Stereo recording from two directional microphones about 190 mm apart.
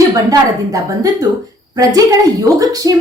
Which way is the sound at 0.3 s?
20° right (ahead or behind).